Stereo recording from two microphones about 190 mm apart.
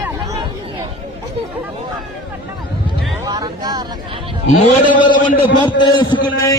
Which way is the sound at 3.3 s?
20° right (ahead or behind).